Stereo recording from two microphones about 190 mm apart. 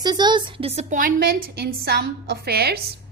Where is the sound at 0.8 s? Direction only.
40° right (ahead or behind).